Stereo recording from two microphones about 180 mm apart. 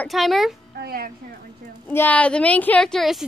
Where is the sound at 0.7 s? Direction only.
60° right (ahead or behind).